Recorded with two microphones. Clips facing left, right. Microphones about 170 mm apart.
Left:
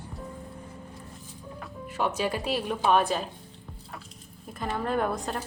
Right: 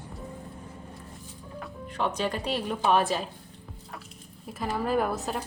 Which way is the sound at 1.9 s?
5° left (ahead or behind).